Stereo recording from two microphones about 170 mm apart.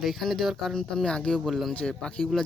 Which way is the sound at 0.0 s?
Centre (ahead or behind).